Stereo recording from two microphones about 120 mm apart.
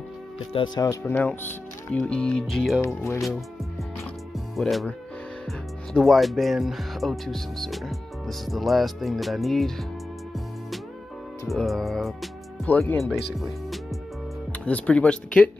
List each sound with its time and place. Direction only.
0.5 s speech: 50° left (ahead or behind)
1.0 s speech: 15° left (ahead or behind)
2.8 s speech: 25° left (ahead or behind)
3.2 s speech: centre (ahead or behind)
4.6 s speech: centre (ahead or behind)
5.9 s speech: centre (ahead or behind)
11.4 s speech: centre (ahead or behind)
12.6 s speech: 15° left (ahead or behind)
13.0 s speech: centre (ahead or behind)
14.6 s speech: 10° left (ahead or behind)